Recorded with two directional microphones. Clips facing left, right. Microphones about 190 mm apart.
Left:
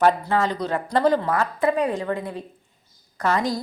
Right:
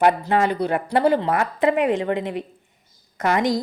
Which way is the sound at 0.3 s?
15° right (ahead or behind).